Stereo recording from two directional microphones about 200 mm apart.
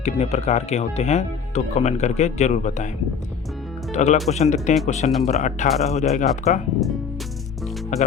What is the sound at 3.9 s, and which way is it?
Speech, 35° left (ahead or behind).